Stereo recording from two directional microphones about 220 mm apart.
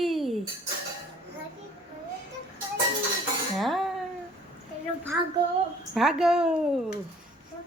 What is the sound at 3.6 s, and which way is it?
Speech, centre (ahead or behind).